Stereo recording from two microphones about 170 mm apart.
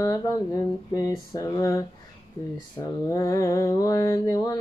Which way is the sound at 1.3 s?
20° left (ahead or behind).